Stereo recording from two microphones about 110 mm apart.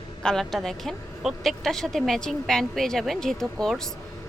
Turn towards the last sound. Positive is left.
turn(degrees=5)  # may be behind; listen again after turning